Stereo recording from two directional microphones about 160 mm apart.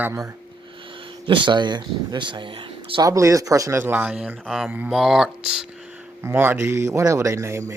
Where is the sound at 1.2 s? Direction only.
30° right (ahead or behind); by 5.6 s 5° right (ahead or behind).